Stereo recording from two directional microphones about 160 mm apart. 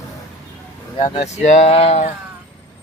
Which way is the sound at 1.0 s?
50° left (ahead or behind).